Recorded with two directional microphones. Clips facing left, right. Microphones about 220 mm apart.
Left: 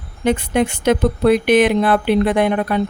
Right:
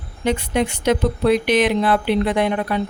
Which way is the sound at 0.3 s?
55° left (ahead or behind).